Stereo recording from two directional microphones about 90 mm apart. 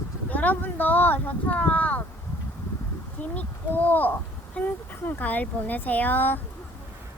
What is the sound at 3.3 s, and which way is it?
Speech, 20° left (ahead or behind).